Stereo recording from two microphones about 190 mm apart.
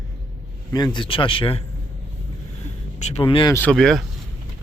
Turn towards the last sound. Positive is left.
turn(degrees=0)  # may be behind; listen again after turning